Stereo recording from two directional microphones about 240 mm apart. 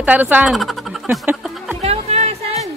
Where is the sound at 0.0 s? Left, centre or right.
Centre.